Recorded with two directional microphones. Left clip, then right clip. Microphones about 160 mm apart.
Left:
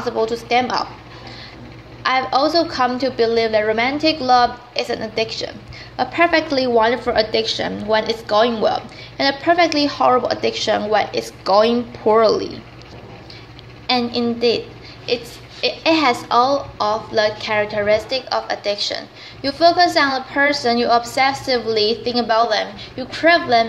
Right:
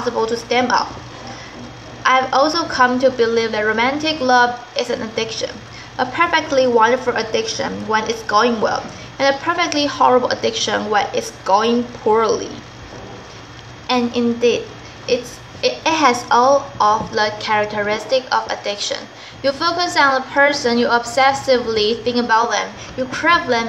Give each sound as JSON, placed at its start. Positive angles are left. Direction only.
{"t": 0.0, "sound": "a woman's voice", "side_deg": 40}
{"t": 2.0, "sound": "a woman's voice", "side_deg": 40}
{"t": 13.8, "sound": "a woman's voice", "side_deg": 45}
{"t": 15.8, "sound": "a woman's voice", "side_deg": 35}